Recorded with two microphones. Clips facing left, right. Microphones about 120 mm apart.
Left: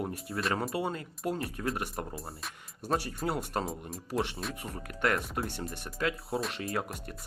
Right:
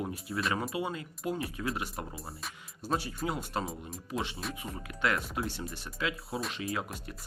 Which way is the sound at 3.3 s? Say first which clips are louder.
Left 3 dB; 60° left (ahead or behind).